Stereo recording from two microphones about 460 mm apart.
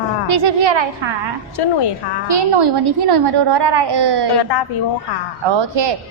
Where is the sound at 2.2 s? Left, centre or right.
Right.